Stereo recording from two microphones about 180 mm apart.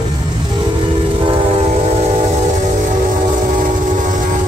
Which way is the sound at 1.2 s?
35° right (ahead or behind).